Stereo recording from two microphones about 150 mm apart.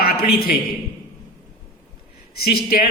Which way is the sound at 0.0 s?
90° left.